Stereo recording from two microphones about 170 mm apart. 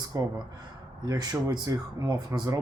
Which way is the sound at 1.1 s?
25° right (ahead or behind).